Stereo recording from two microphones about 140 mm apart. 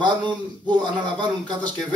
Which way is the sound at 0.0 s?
35° right (ahead or behind).